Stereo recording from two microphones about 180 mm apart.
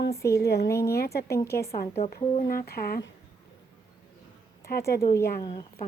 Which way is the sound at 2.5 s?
55° left (ahead or behind).